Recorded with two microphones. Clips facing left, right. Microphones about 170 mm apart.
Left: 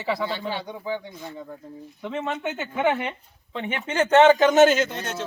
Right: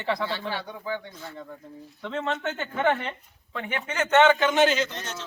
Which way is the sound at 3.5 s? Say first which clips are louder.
Left 4 dB; 25° left (ahead or behind).